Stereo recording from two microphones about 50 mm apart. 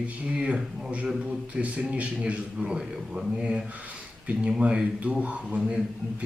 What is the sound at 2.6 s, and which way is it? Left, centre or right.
Speech, centre.